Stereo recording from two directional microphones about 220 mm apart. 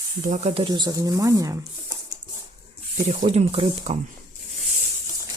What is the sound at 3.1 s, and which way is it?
Speech, 30° right (ahead or behind).